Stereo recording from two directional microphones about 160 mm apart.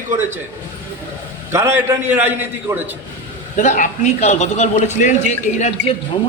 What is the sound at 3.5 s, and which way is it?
A man's voice, 50° left (ahead or behind).